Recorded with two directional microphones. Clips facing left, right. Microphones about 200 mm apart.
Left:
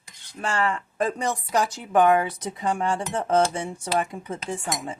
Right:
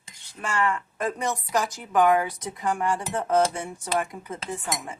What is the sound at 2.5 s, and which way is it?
Speech, 25° left (ahead or behind).